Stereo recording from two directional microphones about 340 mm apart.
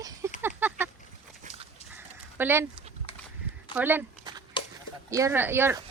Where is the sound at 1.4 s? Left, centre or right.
Right.